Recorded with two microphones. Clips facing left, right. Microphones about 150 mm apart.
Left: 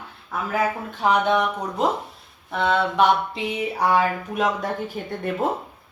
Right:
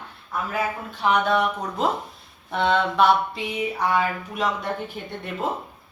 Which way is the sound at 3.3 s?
35° left (ahead or behind).